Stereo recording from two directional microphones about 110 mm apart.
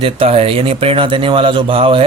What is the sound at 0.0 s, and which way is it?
A man's voice, 65° right (ahead or behind).